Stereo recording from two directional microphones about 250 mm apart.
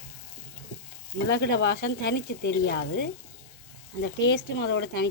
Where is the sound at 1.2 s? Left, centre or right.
Left.